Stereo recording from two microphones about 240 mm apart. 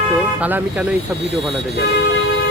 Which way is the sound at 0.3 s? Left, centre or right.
Centre.